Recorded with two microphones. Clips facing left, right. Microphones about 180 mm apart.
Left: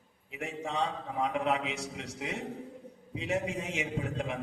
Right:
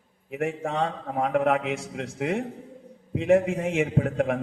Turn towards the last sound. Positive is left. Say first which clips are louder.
# right 9 dB
turn(degrees=-60)  # may be behind; listen again after turning